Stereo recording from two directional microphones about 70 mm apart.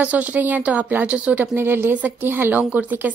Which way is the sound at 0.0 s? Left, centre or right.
Right.